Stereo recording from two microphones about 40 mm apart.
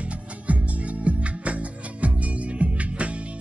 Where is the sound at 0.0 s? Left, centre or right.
Right.